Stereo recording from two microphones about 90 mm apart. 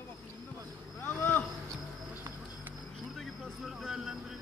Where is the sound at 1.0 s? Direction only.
20° left (ahead or behind).